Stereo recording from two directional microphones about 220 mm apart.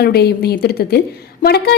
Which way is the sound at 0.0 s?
45° left (ahead or behind).